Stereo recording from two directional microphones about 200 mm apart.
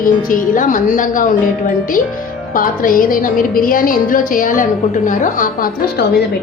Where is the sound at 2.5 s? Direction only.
45° left (ahead or behind).